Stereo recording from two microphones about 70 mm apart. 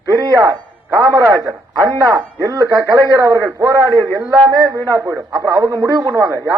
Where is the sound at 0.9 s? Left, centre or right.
Right.